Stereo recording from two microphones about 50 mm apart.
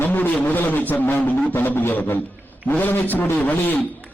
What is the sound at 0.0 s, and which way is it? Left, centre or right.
A man's voice, left.